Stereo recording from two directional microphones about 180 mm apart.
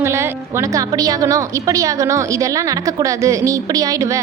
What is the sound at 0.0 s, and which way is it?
A woman's voice, 15° right (ahead or behind).